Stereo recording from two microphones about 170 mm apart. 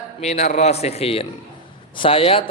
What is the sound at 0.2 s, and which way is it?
A man's voice, 40° left (ahead or behind).